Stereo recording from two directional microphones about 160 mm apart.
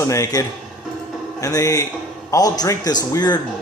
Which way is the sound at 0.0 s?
20° left (ahead or behind).